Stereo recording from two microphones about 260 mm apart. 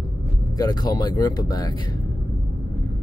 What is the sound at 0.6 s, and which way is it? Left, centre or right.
Speech, centre.